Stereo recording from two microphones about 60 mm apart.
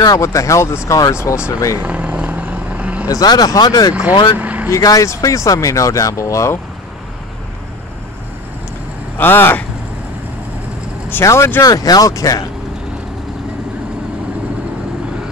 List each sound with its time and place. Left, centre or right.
0.0 s speech: left
1.8 s vehicle: right
3.1 s speech: left
3.9 s speech: right
4.6 s speech: left
5.0 s speech: left
9.2 s speech: left
11.2 s speech: left
11.6 s speech: left